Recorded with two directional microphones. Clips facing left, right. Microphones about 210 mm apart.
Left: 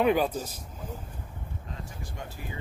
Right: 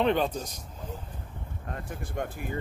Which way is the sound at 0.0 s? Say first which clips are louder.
Left 1 dB; 5° left (ahead or behind).